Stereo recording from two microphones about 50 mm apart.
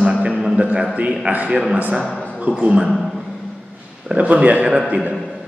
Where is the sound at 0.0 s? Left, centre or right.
Right.